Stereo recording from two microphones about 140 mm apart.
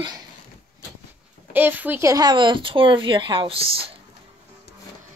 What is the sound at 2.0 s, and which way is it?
Speech, 25° right (ahead or behind).